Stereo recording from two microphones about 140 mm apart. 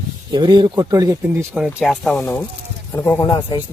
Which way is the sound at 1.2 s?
10° right (ahead or behind).